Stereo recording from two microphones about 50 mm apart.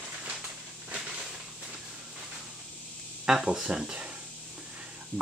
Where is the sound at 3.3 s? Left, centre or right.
Centre.